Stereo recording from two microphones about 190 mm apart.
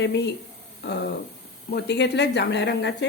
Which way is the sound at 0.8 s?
65° left (ahead or behind).